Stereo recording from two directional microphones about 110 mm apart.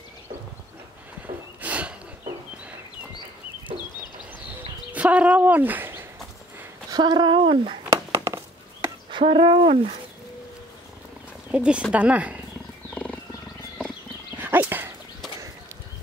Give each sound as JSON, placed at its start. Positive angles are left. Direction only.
{"t": 1.6, "sound": "a sound", "side_deg": -10}
{"t": 4.9, "sound": "speech", "side_deg": -10}
{"t": 6.9, "sound": "speech", "side_deg": -40}
{"t": 8.2, "sound": "a sound", "side_deg": -25}
{"t": 9.4, "sound": "speech", "side_deg": -50}
{"t": 11.5, "sound": "speech", "side_deg": -10}
{"t": 12.9, "sound": "wild animals", "side_deg": 10}
{"t": 14.4, "sound": "dog", "side_deg": -20}